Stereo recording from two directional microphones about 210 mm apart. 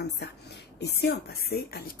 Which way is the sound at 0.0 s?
55° left (ahead or behind).